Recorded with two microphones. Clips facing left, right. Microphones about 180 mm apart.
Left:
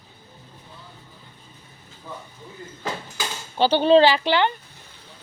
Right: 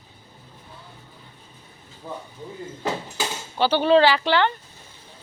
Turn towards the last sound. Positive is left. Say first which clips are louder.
# left 1 dB
turn(degrees=15)  # may be behind; listen again after turning